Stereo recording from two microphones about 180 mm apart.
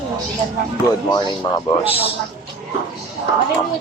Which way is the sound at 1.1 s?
20° left (ahead or behind).